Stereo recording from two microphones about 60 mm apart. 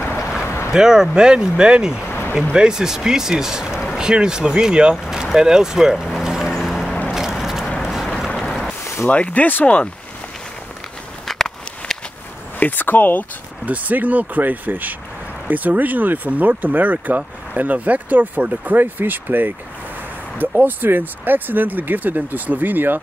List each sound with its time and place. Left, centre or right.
0.7 s speech: centre
2.0 s a sound: left
2.5 s speech: centre
5.0 s vehicle: centre
6.6 s a sound: centre
7.8 s vehicle: centre
8.5 s a sound: centre
9.1 s speech: left
11.2 s a sound: centre
12.5 s speech: left
13.7 s speech: right
20.6 s speech: right